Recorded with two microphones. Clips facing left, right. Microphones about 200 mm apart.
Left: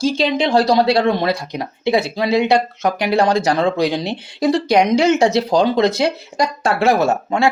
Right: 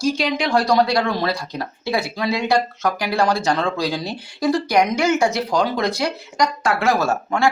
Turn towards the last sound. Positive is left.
turn(degrees=20)  # may be behind; listen again after turning